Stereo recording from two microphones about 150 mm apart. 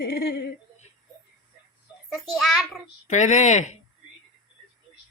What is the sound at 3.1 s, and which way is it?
Speech, 55° left (ahead or behind).